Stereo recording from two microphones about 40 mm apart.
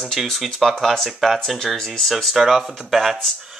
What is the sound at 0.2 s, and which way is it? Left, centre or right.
Speech, centre.